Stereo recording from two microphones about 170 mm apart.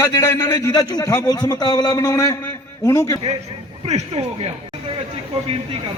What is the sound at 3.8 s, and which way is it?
Speech, 40° right (ahead or behind).